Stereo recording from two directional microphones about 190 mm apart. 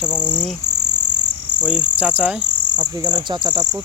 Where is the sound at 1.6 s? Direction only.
5° right (ahead or behind).